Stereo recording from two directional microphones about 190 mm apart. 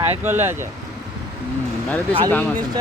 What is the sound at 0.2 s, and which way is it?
Speech, 10° right (ahead or behind).